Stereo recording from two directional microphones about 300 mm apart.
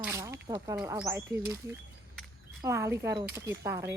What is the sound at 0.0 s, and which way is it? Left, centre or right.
Speech, centre.